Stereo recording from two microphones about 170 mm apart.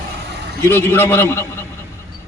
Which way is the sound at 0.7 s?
10° left (ahead or behind).